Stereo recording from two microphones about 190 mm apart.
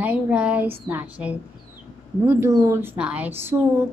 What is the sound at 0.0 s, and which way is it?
A woman's voice, 5° right (ahead or behind).